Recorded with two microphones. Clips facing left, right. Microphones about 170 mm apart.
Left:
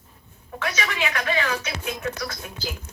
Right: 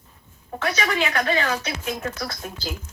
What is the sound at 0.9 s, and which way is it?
Speech, 35° right (ahead or behind).